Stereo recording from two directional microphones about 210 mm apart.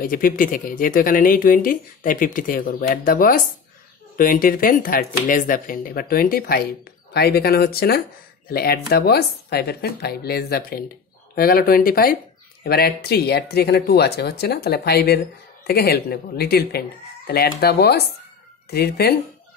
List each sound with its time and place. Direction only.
0.0 s speech: 40° left (ahead or behind)